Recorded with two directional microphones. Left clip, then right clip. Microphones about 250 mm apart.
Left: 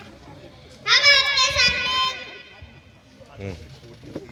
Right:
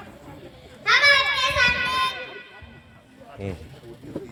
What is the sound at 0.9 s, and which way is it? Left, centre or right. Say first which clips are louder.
Children playing: left 1 dB; left.